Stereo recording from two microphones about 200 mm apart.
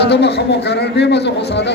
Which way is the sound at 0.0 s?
55° left (ahead or behind).